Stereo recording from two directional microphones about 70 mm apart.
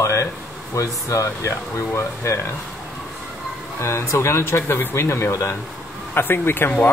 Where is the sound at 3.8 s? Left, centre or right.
Left.